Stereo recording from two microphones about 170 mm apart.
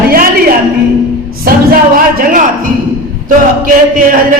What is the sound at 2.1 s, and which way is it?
A man's voice, 55° right (ahead or behind).